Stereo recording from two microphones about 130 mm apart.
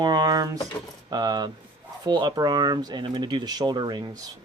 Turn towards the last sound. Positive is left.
turn(degrees=-35)  # may be behind; listen again after turning